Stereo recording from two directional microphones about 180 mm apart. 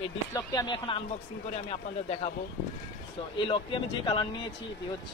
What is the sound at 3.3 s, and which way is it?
Speech, 30° left (ahead or behind).